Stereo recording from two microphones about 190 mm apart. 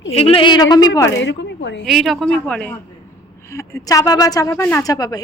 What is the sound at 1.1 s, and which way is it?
Speech, 70° left (ahead or behind).